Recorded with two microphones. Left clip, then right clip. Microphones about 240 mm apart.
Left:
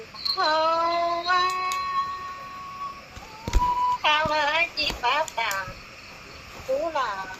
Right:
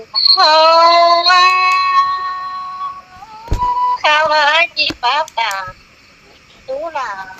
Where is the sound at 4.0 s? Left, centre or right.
Right.